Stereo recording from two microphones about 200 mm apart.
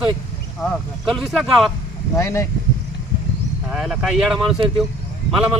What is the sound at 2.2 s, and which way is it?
Speech, 15° left (ahead or behind).